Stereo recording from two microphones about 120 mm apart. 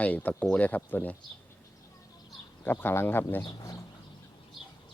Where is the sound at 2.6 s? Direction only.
15° left (ahead or behind).